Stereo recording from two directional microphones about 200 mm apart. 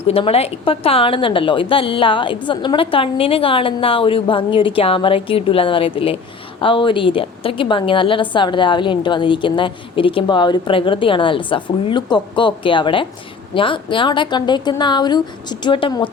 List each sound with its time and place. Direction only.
0.1 s a woman's voice: 30° left (ahead or behind)